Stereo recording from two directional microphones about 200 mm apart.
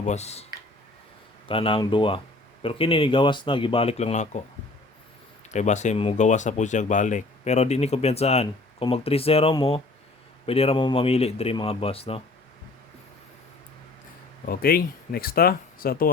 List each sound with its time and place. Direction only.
0.0 s speech: 35° left (ahead or behind)
1.5 s speech: 25° left (ahead or behind)
5.5 s speech: 35° left (ahead or behind)
14.4 s speech: 45° left (ahead or behind)